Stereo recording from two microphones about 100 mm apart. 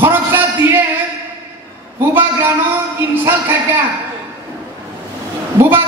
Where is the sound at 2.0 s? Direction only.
20° right (ahead or behind).